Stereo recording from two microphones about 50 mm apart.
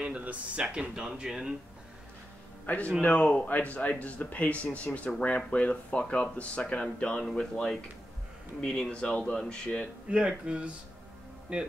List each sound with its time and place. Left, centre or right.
0.0 s speech: right
0.7 s speech: centre
2.6 s a man's voice: left
8.5 s speech: centre
10.0 s speech: right